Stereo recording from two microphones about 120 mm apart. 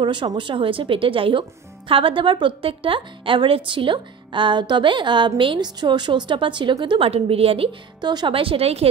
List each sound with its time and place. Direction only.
0.0 s a woman's voice: 40° right (ahead or behind)